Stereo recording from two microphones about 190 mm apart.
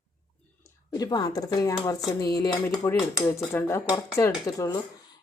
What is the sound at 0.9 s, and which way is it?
Speech, 20° left (ahead or behind).